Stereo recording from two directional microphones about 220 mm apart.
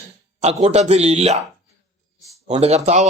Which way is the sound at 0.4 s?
30° right (ahead or behind).